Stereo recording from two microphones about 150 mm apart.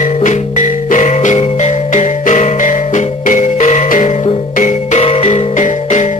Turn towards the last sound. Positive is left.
turn(degrees=55)  # may be behind; listen again after turning